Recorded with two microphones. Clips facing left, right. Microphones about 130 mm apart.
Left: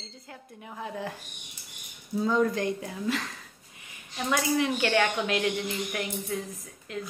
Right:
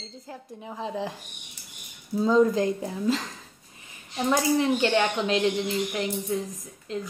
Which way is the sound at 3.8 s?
30° right (ahead or behind).